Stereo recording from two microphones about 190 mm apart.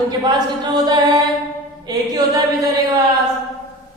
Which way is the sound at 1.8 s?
20° right (ahead or behind).